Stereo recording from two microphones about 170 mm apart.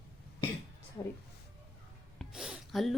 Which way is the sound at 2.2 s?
5° right (ahead or behind).